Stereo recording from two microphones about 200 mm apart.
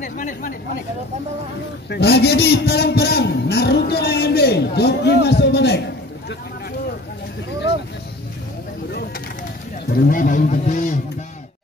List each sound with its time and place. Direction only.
0.0 s a man's voice: 40° left (ahead or behind)
1.9 s a man's voice: 55° left (ahead or behind)
9.9 s a man's voice: 45° left (ahead or behind)